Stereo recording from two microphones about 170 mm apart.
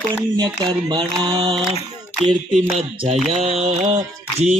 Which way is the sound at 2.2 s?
Centre (ahead or behind).